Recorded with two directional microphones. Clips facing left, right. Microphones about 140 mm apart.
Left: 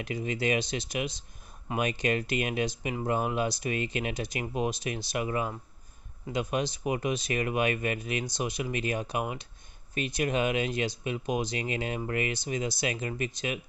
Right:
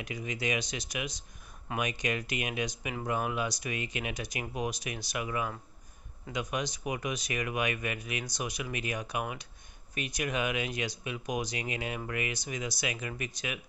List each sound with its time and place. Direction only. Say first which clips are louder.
0.0 s speech: left 5 dB; 30° left (ahead or behind)